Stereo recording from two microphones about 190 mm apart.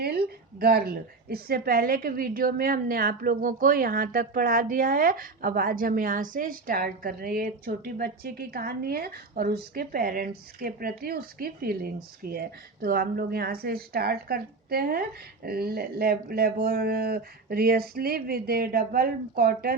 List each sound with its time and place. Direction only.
0.0 s a woman's voice: 55° right (ahead or behind)